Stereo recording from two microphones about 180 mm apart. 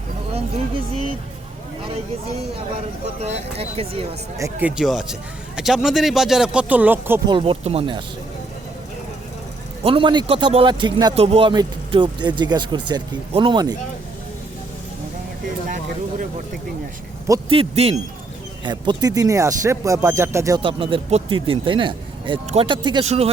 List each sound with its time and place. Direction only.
3.2 s speech: 35° right (ahead or behind)
4.4 s speech: 15° right (ahead or behind)
4.8 s speech: centre (ahead or behind)
7.3 s speech: 30° right (ahead or behind)
9.8 s a man's voice: 30° right (ahead or behind)
17.5 s speech: 30° right (ahead or behind); by 20.6 s 15° right (ahead or behind)
20.6 s a man's voice: 30° right (ahead or behind)